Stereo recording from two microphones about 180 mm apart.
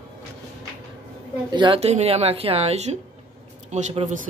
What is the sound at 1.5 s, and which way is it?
Speech, 30° right (ahead or behind).